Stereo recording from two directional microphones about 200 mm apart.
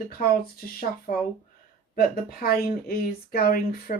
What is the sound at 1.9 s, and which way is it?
Speech, 50° left (ahead or behind).